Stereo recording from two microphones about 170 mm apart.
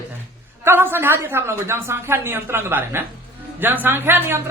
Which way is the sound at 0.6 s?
15° right (ahead or behind).